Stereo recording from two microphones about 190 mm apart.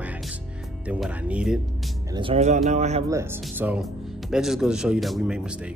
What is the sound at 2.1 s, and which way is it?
Speech, 30° right (ahead or behind).